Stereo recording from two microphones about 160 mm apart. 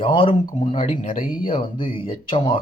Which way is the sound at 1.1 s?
60° left (ahead or behind).